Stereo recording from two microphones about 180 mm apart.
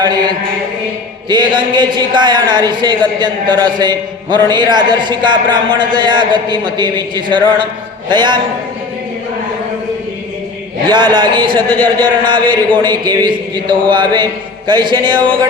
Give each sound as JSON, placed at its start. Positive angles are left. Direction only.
{"t": 0.0, "sound": "mantra", "side_deg": -25}
{"t": 1.3, "sound": "a man's voice", "side_deg": -25}
{"t": 10.8, "sound": "a man's voice", "side_deg": -25}